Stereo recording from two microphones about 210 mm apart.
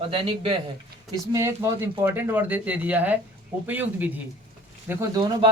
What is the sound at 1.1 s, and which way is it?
A man's voice, 15° right (ahead or behind).